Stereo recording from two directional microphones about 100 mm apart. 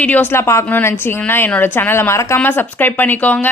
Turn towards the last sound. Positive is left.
turn(degrees=15)  # may be behind; listen again after turning